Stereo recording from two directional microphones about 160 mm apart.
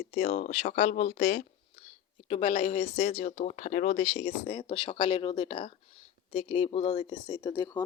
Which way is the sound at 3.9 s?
40° left (ahead or behind).